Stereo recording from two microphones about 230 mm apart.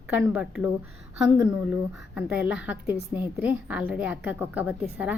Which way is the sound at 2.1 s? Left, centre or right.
Centre.